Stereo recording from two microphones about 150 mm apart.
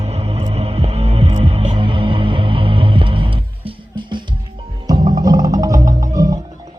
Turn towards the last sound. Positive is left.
turn(degrees=-20)  # may be behind; listen again after turning